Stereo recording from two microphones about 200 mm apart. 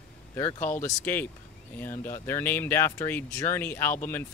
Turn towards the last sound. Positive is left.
turn(degrees=10)  # may be behind; listen again after turning